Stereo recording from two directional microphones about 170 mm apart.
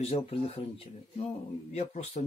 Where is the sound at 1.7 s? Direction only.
40° left (ahead or behind).